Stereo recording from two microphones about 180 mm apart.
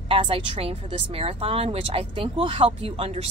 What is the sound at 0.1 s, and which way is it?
Speech, 30° right (ahead or behind).